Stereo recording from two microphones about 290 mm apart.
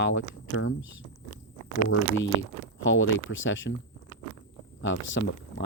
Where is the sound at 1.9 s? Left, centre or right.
Left.